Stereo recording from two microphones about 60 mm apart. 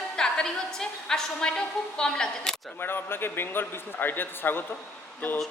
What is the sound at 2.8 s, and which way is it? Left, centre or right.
Speech, left.